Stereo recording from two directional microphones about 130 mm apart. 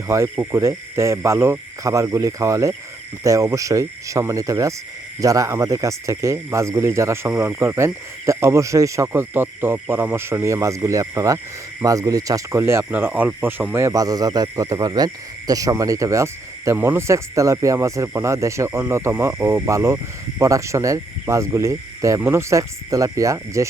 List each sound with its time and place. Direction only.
0.1 s speech: 20° right (ahead or behind)